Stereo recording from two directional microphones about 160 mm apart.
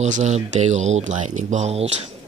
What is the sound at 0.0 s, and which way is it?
Speech, 45° right (ahead or behind).